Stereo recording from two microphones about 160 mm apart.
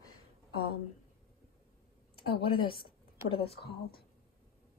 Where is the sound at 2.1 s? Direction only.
35° left (ahead or behind).